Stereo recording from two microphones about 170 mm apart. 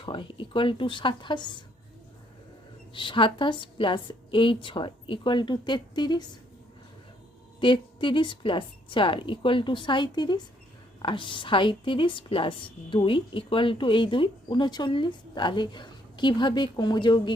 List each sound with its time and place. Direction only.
0.0 s a woman's voice: 30° left (ahead or behind)
2.9 s a woman's voice: 30° left (ahead or behind)
7.6 s a woman's voice: 30° left (ahead or behind)